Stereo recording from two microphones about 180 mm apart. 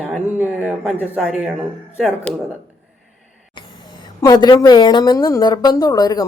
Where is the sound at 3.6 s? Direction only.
25° left (ahead or behind).